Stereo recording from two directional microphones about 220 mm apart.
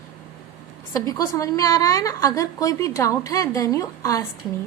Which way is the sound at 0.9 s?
15° left (ahead or behind).